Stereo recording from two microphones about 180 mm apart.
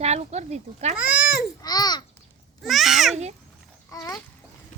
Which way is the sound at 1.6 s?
20° left (ahead or behind).